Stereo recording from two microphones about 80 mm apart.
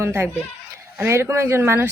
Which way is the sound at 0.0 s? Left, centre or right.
Right.